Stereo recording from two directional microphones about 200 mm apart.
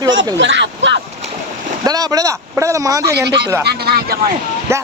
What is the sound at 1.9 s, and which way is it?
Speech, 20° right (ahead or behind).